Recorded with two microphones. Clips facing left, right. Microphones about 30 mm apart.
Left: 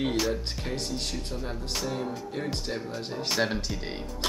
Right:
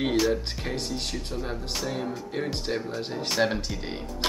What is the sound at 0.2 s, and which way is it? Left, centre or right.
Speech, centre.